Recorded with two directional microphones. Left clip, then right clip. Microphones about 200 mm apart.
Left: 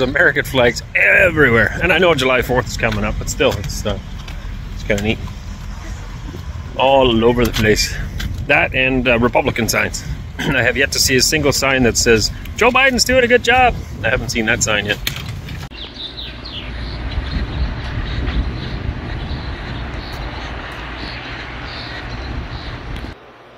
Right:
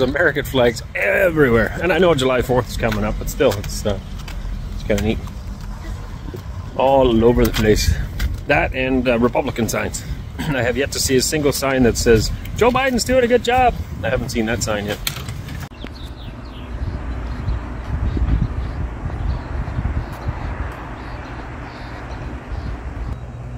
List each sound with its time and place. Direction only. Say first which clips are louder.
0.0 s speech: left 3 dB; 5° right (ahead or behind)
4.8 s speech: left 2 dB; centre (ahead or behind)
6.8 s speech: left 2 dB; 5° right (ahead or behind)